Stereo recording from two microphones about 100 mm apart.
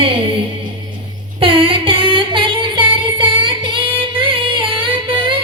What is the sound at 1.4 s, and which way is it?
Music, 65° right (ahead or behind).